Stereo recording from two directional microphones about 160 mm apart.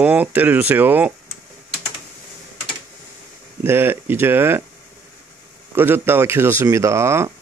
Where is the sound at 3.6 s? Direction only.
15° right (ahead or behind).